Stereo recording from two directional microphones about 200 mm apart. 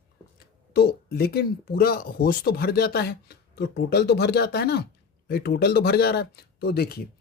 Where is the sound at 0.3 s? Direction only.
55° left (ahead or behind).